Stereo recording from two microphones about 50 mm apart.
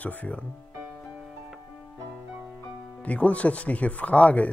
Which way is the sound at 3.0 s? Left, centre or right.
Left.